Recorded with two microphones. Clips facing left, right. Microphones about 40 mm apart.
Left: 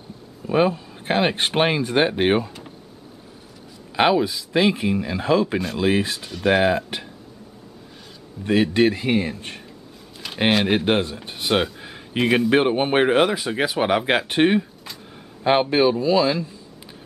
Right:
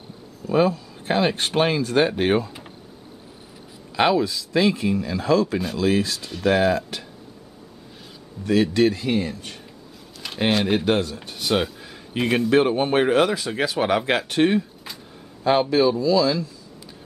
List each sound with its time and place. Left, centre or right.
0.5 s speech: left
3.9 s speech: left
8.5 s speech: left
10.2 s a sound: centre
10.9 s speech: left
11.8 s a sound: left
12.2 s speech: centre
12.4 s speech: left